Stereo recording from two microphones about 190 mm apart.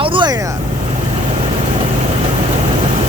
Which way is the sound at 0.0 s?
25° right (ahead or behind).